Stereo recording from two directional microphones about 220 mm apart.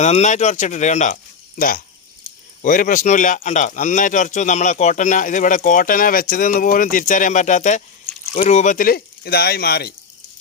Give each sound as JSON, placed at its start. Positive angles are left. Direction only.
{"t": 0.0, "sound": "speech", "side_deg": 30}